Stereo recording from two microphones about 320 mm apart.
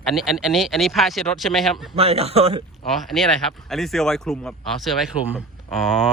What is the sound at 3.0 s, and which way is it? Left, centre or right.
Speech, centre.